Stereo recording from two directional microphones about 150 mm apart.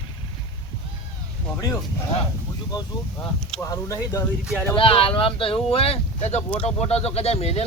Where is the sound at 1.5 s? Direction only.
15° left (ahead or behind).